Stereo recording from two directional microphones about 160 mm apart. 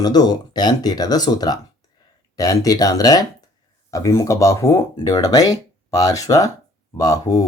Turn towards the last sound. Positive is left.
turn(degrees=20)  # may be behind; listen again after turning